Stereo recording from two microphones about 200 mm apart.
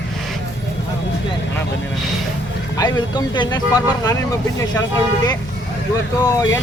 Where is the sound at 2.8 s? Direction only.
20° left (ahead or behind).